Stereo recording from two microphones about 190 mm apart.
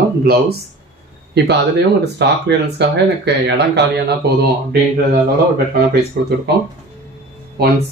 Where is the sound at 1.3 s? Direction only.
60° right (ahead or behind).